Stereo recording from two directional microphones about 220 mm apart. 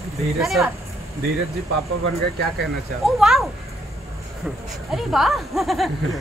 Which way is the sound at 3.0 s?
Centre (ahead or behind).